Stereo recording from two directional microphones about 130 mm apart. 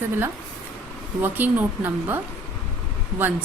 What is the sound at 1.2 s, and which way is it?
Speech, 15° right (ahead or behind).